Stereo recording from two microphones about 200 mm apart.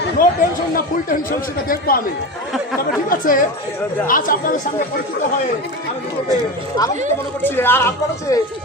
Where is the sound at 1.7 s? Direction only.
45° left (ahead or behind).